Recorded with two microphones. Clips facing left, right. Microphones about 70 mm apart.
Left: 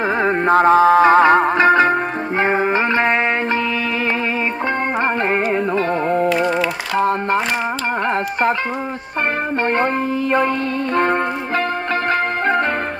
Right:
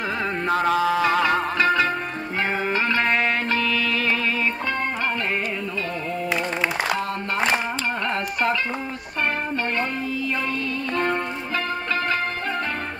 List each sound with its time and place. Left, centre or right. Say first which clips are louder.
0.2 s music: left 9 dB; left
7.0 s a sound: left 9 dB; left
11.0 s music: left 7 dB; left